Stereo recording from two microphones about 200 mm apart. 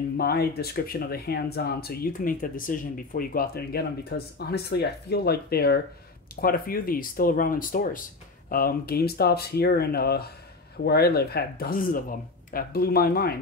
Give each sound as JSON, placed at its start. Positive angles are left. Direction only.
{"t": 0.2, "sound": "speech", "side_deg": 50}